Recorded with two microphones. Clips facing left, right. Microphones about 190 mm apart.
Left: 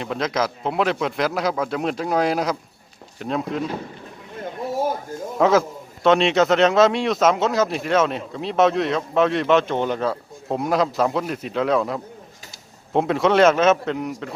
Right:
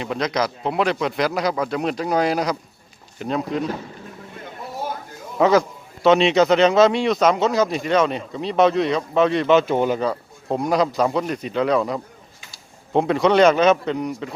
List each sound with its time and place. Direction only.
0.0 s a man's voice: centre (ahead or behind)
4.8 s a sound: 45° left (ahead or behind)
5.4 s a man's voice: centre (ahead or behind)